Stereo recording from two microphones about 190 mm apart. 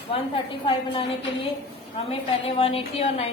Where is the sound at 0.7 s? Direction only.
30° left (ahead or behind).